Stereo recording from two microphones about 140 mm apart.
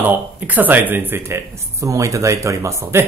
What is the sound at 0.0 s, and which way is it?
Speech, 10° right (ahead or behind).